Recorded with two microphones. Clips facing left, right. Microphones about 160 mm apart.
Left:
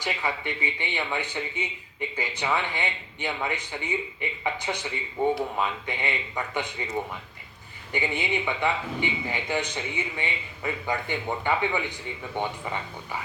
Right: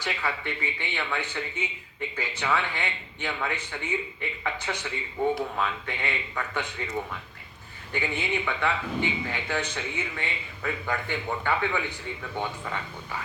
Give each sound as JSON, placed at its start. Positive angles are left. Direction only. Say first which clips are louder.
{"t": 0.0, "sound": "a man's voice", "louder": "left 1 dB", "side_deg": 15}